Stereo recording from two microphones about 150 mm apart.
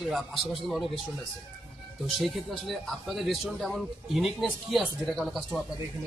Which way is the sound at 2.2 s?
Centre (ahead or behind).